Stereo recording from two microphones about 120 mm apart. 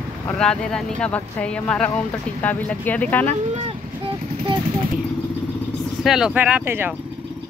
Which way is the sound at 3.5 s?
50° right (ahead or behind).